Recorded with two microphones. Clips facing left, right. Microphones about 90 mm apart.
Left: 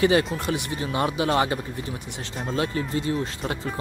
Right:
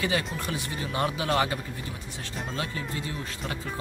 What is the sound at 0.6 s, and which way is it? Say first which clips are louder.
Speech: left 3 dB; 20° left (ahead or behind).